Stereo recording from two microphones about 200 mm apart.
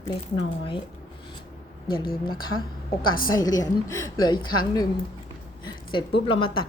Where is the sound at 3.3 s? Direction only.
20° left (ahead or behind).